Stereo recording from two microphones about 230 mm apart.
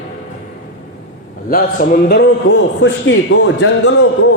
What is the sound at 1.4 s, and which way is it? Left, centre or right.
Speech, left.